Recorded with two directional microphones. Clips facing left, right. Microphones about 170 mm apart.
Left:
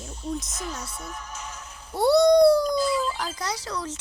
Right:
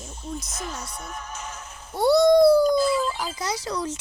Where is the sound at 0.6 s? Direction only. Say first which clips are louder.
Even; 55° right (ahead or behind).